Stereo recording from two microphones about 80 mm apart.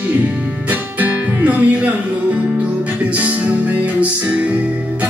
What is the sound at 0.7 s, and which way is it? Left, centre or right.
Music, right.